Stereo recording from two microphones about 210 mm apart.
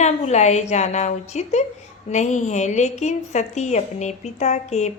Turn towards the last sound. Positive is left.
turn(degrees=35)  # may be behind; listen again after turning